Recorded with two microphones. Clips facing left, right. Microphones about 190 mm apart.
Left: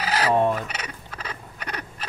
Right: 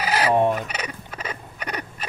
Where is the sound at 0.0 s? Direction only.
15° right (ahead or behind).